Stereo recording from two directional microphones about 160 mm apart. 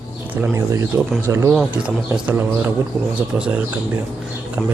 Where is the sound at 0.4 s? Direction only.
20° right (ahead or behind).